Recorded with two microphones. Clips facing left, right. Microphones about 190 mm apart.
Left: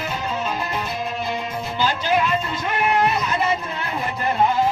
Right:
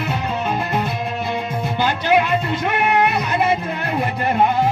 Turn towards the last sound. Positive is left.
turn(degrees=-60)  # may be behind; listen again after turning